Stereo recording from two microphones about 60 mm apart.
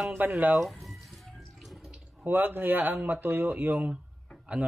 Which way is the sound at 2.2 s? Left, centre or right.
Right.